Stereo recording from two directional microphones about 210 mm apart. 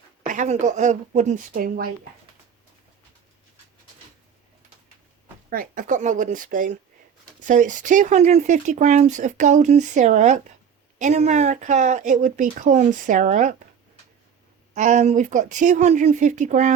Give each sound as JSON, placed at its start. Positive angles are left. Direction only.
{"t": 0.3, "sound": "speech", "side_deg": -35}
{"t": 5.5, "sound": "speech", "side_deg": -40}
{"t": 14.8, "sound": "speech", "side_deg": -35}